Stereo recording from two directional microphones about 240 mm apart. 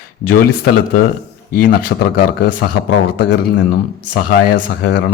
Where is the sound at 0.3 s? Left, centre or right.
Left.